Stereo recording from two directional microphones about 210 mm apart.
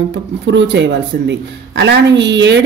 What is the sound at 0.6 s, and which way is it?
A woman's voice, 55° right (ahead or behind).